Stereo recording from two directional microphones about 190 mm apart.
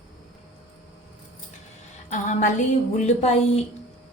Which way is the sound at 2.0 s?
40° left (ahead or behind).